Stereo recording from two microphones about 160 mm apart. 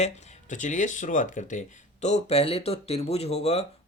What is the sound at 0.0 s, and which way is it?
Speech, 45° left (ahead or behind).